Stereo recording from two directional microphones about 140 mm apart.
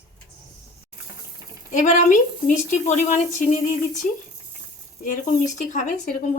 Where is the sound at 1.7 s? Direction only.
65° left (ahead or behind).